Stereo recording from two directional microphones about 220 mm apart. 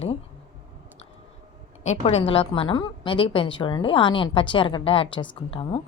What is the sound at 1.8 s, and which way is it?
A woman's voice, 30° left (ahead or behind).